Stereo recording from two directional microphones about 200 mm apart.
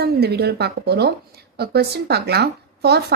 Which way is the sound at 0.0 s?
55° right (ahead or behind).